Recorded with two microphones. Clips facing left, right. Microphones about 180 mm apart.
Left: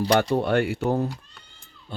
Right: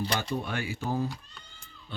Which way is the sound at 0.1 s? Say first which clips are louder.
Left 11 dB; 70° left (ahead or behind).